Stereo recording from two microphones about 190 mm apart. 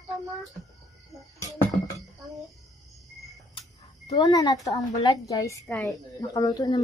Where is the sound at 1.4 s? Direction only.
20° left (ahead or behind).